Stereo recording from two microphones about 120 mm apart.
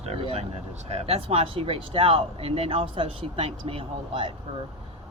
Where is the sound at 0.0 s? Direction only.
55° right (ahead or behind).